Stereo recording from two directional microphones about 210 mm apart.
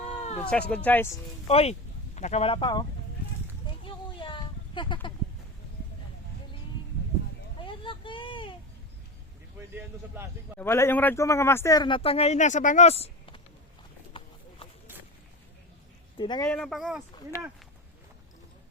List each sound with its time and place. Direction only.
0.0 s cat: 30° left (ahead or behind)
0.7 s speech: 10° left (ahead or behind)
1.5 s speech: 30° left (ahead or behind)
3.8 s a sound: 25° left (ahead or behind)
7.6 s vehicle: 25° left (ahead or behind)
10.6 s speech: 10° left (ahead or behind); by 13.4 s 25° left (ahead or behind)
16.1 s speech: 20° left (ahead or behind)
16.5 s speech: centre (ahead or behind)
17.3 s speech: 15° left (ahead or behind)